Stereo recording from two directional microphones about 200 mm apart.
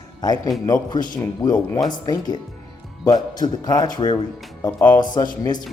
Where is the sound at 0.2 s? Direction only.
20° left (ahead or behind).